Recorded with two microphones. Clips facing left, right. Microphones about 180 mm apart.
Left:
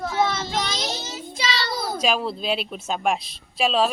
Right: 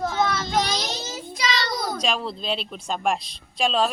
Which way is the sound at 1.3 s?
30° left (ahead or behind).